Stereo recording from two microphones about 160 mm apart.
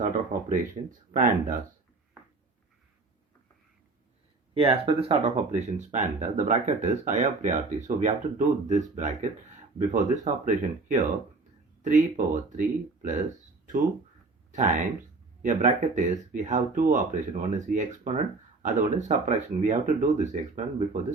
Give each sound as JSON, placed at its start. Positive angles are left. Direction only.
{"t": 0.0, "sound": "speech", "side_deg": -55}
{"t": 4.5, "sound": "speech", "side_deg": -35}
{"t": 10.4, "sound": "speech", "side_deg": -55}
{"t": 12.1, "sound": "speech", "side_deg": -55}
{"t": 14.5, "sound": "speech", "side_deg": -50}